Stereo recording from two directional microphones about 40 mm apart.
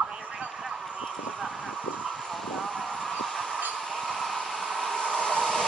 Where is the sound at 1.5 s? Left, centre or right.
Left.